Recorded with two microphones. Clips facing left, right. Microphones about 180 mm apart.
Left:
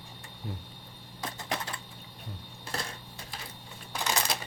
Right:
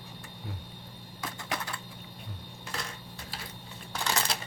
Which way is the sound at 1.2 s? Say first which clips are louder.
Left 1 dB; 25° left (ahead or behind).